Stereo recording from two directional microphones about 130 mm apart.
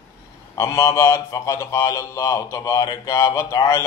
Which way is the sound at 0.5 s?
20° left (ahead or behind).